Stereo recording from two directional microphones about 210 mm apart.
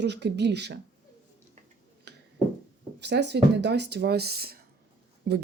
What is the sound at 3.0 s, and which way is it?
Speech, 55° right (ahead or behind).